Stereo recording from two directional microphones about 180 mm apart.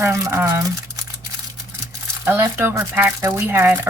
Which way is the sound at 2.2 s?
15° right (ahead or behind).